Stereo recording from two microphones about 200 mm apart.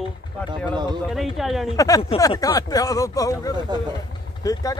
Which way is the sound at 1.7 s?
15° left (ahead or behind).